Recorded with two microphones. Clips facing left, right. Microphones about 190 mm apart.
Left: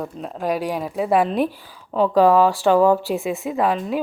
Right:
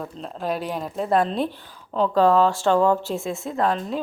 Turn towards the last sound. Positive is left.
turn(degrees=10)  # may be behind; listen again after turning